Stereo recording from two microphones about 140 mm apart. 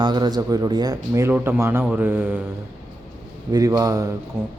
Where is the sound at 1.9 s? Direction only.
15° right (ahead or behind).